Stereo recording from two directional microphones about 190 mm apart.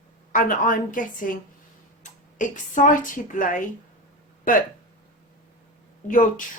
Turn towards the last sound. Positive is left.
turn(degrees=45)  # may be behind; listen again after turning